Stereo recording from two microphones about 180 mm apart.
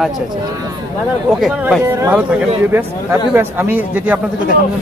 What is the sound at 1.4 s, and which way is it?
Speech, centre (ahead or behind).